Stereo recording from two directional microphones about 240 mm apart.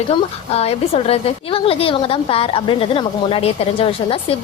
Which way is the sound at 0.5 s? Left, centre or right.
Left.